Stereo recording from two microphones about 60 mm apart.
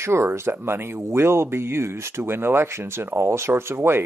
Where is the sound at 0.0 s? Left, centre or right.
Right.